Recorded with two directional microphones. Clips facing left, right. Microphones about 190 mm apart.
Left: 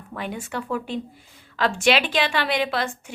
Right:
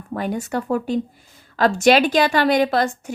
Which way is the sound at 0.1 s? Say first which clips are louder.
Right 7 dB; 45° right (ahead or behind).